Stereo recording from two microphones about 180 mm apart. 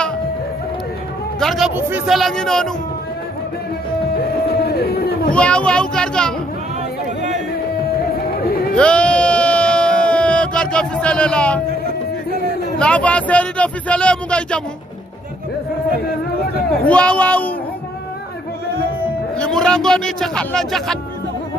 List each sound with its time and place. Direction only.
1.4 s a man's voice: centre (ahead or behind)
1.8 s speech: 10° right (ahead or behind)
2.1 s a man's voice: centre (ahead or behind)
4.5 s a sound: 60° left (ahead or behind)
5.3 s a child's voice: 5° left (ahead or behind)
8.7 s a sound: 5° left (ahead or behind)
12.7 s a man's voice: 5° left (ahead or behind)
16.8 s a man's voice: 5° left (ahead or behind)
19.3 s a man's voice: 5° left (ahead or behind)